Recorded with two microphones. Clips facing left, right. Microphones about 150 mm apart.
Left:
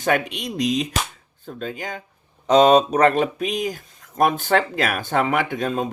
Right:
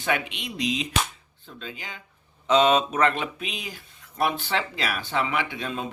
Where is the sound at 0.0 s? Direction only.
40° left (ahead or behind).